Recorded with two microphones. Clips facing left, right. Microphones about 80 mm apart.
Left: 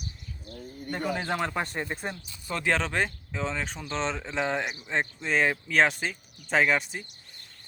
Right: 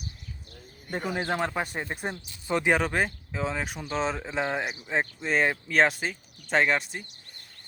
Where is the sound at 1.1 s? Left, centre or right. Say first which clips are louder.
Right 2 dB; centre.